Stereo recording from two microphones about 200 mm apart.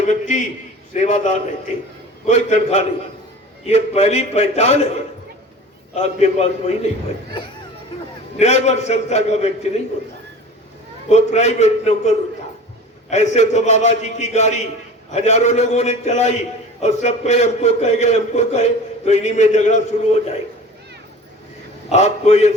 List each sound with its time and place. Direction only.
0.1 s a man's voice: 35° left (ahead or behind)
8.4 s a man's voice: 35° left (ahead or behind)
11.1 s a man's voice: 35° left (ahead or behind)
21.8 s a man's voice: 35° left (ahead or behind)